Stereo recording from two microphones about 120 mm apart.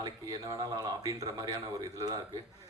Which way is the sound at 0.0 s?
30° right (ahead or behind).